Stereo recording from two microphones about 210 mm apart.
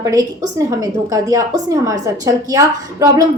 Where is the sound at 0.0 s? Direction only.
15° right (ahead or behind).